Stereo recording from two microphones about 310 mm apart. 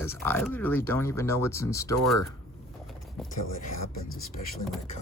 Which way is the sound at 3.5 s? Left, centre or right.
Left.